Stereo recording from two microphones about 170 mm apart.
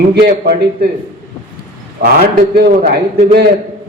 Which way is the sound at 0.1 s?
70° right (ahead or behind).